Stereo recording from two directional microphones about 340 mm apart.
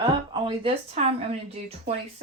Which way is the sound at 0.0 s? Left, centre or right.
Centre.